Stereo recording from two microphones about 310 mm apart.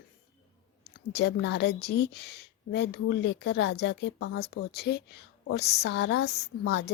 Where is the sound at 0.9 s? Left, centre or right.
Left.